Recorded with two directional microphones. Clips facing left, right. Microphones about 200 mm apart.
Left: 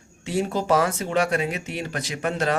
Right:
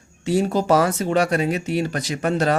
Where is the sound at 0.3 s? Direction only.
40° right (ahead or behind).